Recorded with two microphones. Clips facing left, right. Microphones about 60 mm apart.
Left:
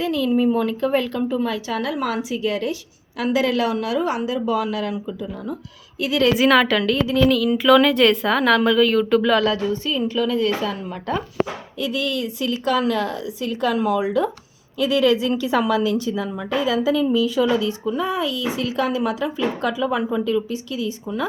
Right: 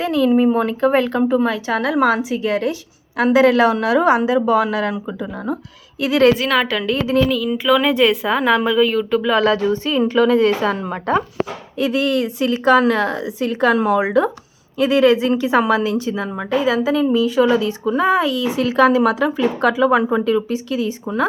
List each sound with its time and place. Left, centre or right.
0.0 s a woman's voice: right
6.5 s speech: centre
9.4 s speech: right
10.8 s a woman's voice: right
11.8 s a woman's voice: right